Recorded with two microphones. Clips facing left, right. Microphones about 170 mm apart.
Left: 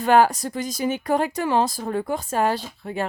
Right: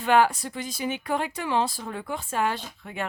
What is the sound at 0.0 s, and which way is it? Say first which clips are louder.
A woman's voice: left 4 dB; 40° left (ahead or behind).